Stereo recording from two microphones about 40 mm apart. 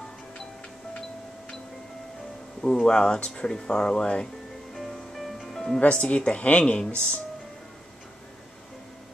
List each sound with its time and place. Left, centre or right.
2.6 s speech: left
4.7 s music: centre
5.8 s speech: left